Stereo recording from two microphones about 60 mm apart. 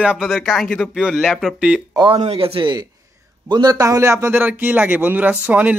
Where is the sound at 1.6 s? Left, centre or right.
Centre.